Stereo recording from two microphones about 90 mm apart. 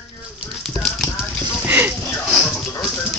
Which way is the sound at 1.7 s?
20° right (ahead or behind).